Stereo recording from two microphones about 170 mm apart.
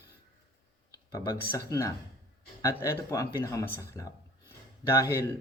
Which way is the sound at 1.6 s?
20° left (ahead or behind).